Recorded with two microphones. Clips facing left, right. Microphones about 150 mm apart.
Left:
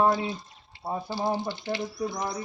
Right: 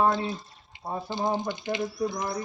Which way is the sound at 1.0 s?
20° right (ahead or behind).